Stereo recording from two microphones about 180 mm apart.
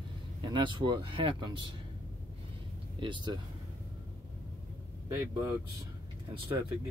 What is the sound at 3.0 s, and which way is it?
Speech, 25° right (ahead or behind).